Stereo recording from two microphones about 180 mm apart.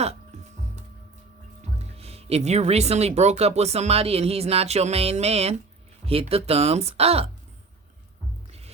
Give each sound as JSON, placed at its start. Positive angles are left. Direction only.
{"t": 1.8, "sound": "speech", "side_deg": -35}
{"t": 8.4, "sound": "music", "side_deg": -35}